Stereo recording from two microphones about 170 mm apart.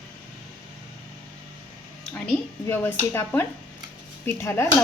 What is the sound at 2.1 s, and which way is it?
A woman's voice, 10° left (ahead or behind).